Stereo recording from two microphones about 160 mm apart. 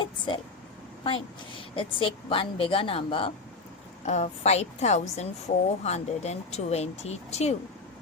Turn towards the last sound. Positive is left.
turn(degrees=40)  # may be behind; listen again after turning